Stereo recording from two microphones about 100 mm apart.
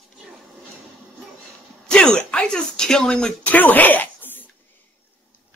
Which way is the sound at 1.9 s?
10° left (ahead or behind).